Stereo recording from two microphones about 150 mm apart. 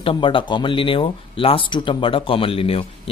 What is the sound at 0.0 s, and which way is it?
Speech, 35° left (ahead or behind).